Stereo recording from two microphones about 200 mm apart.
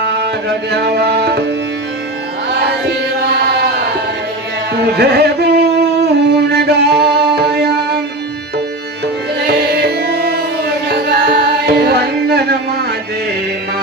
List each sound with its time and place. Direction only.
0.0 s music: 55° right (ahead or behind)
2.5 s carnatic music: 55° right (ahead or behind)
4.7 s music: 55° right (ahead or behind)